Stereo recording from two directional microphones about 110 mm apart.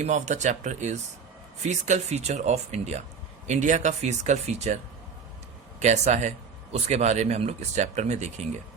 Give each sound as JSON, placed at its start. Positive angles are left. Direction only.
{"t": 0.0, "sound": "speech", "side_deg": -90}
{"t": 5.8, "sound": "speech", "side_deg": -90}